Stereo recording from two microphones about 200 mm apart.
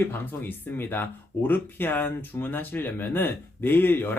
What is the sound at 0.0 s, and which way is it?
Speech, 10° left (ahead or behind).